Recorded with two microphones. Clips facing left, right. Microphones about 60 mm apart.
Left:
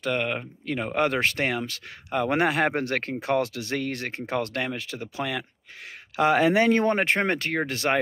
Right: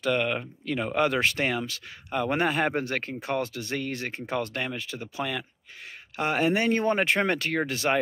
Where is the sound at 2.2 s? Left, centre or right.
Left.